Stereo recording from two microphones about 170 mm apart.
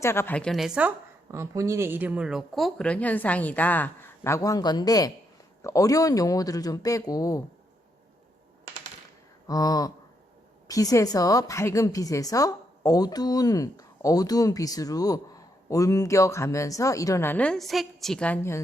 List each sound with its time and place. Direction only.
0.0 s a woman's voice: 15° left (ahead or behind)
9.5 s a woman's voice: 20° left (ahead or behind)